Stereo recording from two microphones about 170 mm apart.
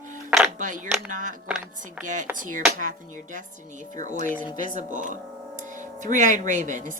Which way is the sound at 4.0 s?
45° right (ahead or behind).